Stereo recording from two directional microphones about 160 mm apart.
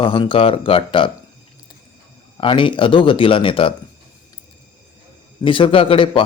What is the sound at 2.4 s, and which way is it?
Speech, 30° left (ahead or behind).